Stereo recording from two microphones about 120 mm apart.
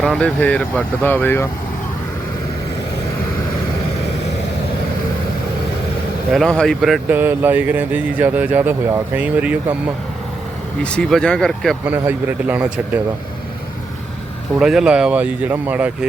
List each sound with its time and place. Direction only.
0.0 s speech: 5° left (ahead or behind)
6.3 s speech: 5° left (ahead or behind)
7.1 s speech: 15° right (ahead or behind)
10.8 s speech: 5° left (ahead or behind)
11.9 s speech: 15° right (ahead or behind)
14.6 s speech: 5° right (ahead or behind)